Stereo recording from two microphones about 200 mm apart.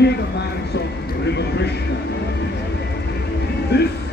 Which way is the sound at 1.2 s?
55° left (ahead or behind).